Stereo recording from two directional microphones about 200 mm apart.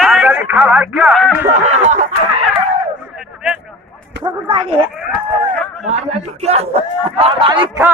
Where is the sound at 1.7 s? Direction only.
35° right (ahead or behind).